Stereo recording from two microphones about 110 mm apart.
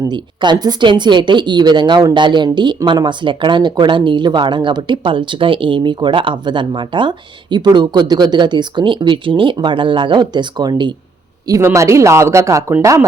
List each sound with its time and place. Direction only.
0.0 s speech: 40° right (ahead or behind)
11.4 s speech: 30° right (ahead or behind)